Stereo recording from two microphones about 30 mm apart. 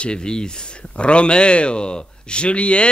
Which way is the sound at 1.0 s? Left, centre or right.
Left.